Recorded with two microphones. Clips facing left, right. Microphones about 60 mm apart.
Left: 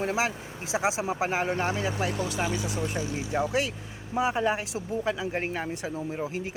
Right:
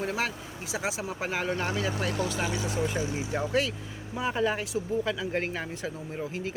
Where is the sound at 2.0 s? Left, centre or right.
Centre.